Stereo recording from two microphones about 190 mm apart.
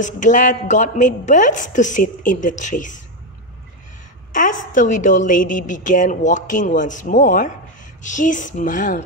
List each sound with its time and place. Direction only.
0.0 s a woman's voice: 40° left (ahead or behind)
4.3 s a woman's voice: 45° left (ahead or behind)